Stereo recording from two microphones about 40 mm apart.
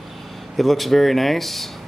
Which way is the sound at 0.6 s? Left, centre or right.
Centre.